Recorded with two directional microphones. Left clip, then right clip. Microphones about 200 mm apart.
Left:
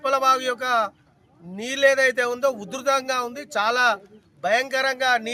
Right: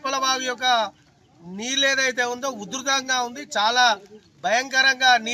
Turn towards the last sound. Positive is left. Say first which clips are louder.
# right 4 dB
turn(degrees=25)  # may be behind; listen again after turning